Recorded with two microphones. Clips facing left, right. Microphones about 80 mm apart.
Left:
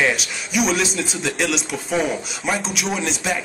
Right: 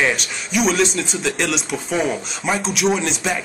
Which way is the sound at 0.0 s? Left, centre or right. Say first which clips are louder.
Even; centre.